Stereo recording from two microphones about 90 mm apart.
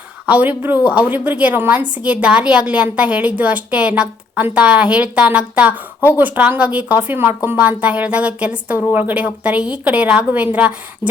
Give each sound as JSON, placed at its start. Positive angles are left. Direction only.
{"t": 0.3, "sound": "a woman's voice", "side_deg": -20}